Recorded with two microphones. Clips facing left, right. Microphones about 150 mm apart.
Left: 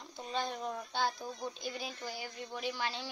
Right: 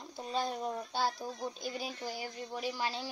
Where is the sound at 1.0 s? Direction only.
10° right (ahead or behind).